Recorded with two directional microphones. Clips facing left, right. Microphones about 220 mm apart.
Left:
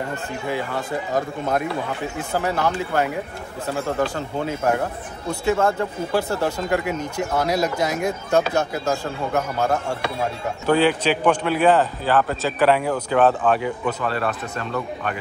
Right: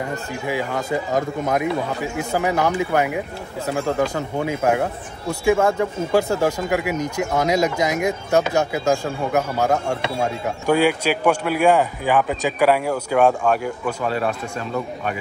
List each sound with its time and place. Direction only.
0.1 s speech: 10° right (ahead or behind)